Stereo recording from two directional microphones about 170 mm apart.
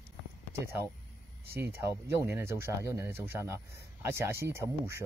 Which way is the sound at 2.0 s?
15° right (ahead or behind).